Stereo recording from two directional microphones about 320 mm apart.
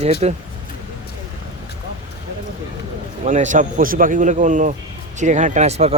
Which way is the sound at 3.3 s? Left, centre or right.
Right.